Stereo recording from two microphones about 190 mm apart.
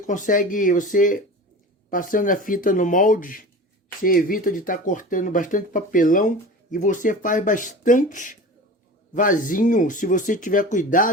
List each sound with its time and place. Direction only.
0.1 s speech: 45° left (ahead or behind)